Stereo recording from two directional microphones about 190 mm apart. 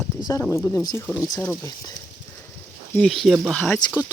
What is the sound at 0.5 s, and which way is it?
Speech, 15° left (ahead or behind).